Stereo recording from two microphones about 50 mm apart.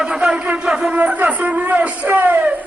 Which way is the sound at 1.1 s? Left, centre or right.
Right.